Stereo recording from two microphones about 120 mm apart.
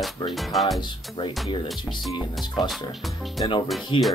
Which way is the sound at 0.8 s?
45° left (ahead or behind).